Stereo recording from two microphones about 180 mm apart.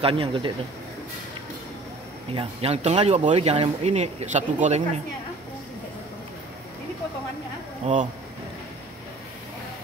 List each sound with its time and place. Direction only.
0.0 s speech: 30° right (ahead or behind)
2.3 s speech: 35° right (ahead or behind)
7.8 s speech: 45° right (ahead or behind)